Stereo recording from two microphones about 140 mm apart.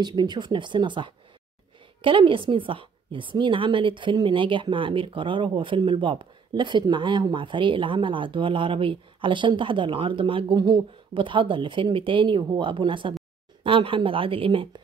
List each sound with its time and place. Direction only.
0.0 s a woman's voice: 30° right (ahead or behind)